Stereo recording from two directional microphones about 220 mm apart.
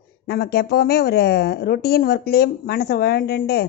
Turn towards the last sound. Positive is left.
turn(degrees=45)  # may be behind; listen again after turning